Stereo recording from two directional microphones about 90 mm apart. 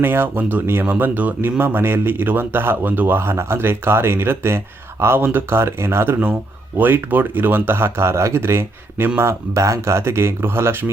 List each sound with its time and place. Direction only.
0.0 s speech: 25° right (ahead or behind)